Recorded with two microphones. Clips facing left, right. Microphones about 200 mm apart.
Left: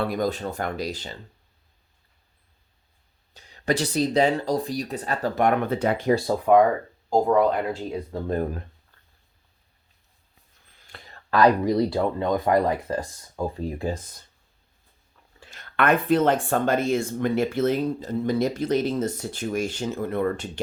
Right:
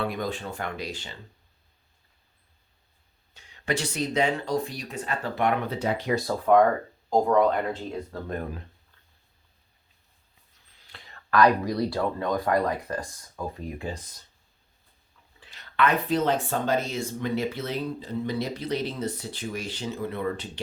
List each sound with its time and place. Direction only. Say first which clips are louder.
0.0 s speech: left 5 dB; 40° left (ahead or behind)
3.3 s speech: left 4 dB; 35° left (ahead or behind); by 6.1 s 55° left (ahead or behind)
6.5 s speech: left 2 dB; 5° left (ahead or behind)
10.8 s a sound: left 4 dB; 50° left (ahead or behind)
11.1 s speech: left 2 dB; 30° left (ahead or behind); by 14.3 s 50° left (ahead or behind)
15.4 s speech: even; 45° left (ahead or behind)